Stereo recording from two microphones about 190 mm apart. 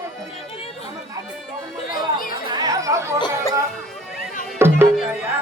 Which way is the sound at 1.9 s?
50° left (ahead or behind).